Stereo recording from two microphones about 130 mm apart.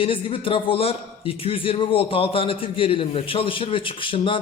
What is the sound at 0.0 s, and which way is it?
A man's voice, 45° left (ahead or behind).